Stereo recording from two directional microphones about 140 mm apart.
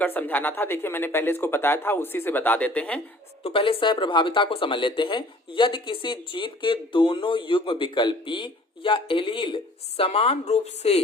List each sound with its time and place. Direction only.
0.0 s speech: 15° left (ahead or behind)
3.4 s speech: 40° left (ahead or behind)